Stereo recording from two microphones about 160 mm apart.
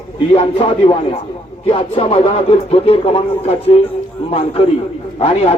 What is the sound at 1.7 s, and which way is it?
Speech, 35° left (ahead or behind).